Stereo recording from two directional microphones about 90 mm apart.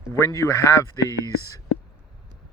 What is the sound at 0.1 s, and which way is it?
Speech, 35° left (ahead or behind).